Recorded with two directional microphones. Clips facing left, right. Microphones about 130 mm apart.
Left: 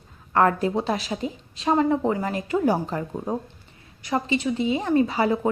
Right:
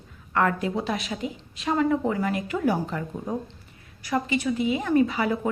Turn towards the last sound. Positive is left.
turn(degrees=30)  # may be behind; listen again after turning